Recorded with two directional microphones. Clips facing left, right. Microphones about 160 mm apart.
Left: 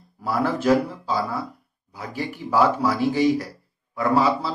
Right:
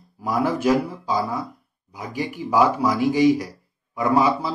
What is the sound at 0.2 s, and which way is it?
Speech, 15° right (ahead or behind).